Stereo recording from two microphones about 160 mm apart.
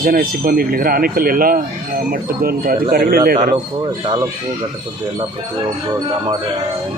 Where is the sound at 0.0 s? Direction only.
65° right (ahead or behind).